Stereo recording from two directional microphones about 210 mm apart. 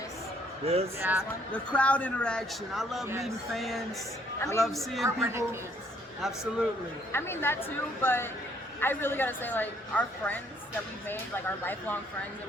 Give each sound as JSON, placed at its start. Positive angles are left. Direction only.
{"t": 0.6, "sound": "speech", "side_deg": -30}
{"t": 0.9, "sound": "a woman's voice", "side_deg": -10}
{"t": 1.5, "sound": "a man's voice", "side_deg": 5}
{"t": 4.4, "sound": "a man's voice", "side_deg": 15}
{"t": 4.6, "sound": "a man's voice", "side_deg": 0}
{"t": 5.0, "sound": "a woman's voice", "side_deg": -15}
{"t": 7.1, "sound": "a woman's voice", "side_deg": 10}